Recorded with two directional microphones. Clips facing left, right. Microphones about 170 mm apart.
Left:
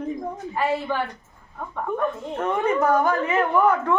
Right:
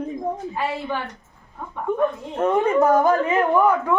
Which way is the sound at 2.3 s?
20° right (ahead or behind).